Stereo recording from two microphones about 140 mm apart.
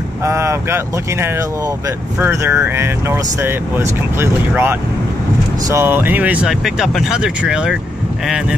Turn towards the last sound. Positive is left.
turn(degrees=-5)  # may be behind; listen again after turning